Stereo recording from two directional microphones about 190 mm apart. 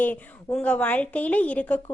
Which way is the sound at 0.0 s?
10° left (ahead or behind).